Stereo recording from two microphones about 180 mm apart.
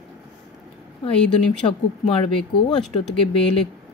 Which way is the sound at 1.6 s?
30° left (ahead or behind).